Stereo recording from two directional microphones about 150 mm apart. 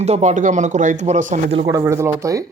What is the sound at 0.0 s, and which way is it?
A man's voice, 50° right (ahead or behind).